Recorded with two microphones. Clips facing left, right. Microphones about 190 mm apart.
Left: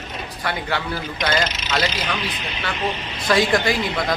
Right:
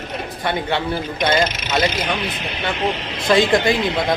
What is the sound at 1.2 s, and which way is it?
Speech, 25° right (ahead or behind).